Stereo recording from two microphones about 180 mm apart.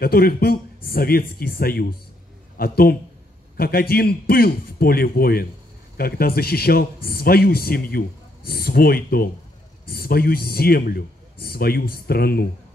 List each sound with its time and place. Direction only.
0.0 s a man's voice: 55° left (ahead or behind)